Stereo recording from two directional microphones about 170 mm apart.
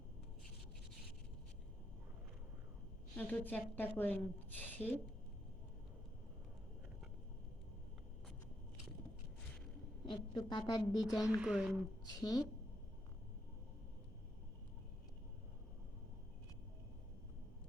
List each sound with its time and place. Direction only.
3.2 s a woman's voice: 10° left (ahead or behind)
10.1 s a woman's voice: 25° left (ahead or behind)
11.0 s speech: centre (ahead or behind)
12.2 s a woman's voice: 25° left (ahead or behind)